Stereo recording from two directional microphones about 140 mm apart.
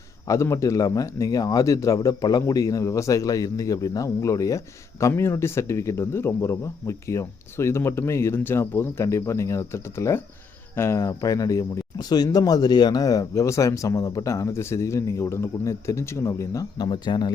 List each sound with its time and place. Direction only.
0.3 s speech: 20° left (ahead or behind)